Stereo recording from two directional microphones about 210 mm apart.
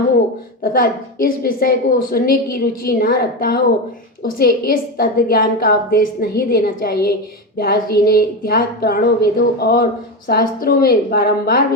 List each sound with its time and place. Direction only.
0.6 s a woman's voice: 45° left (ahead or behind)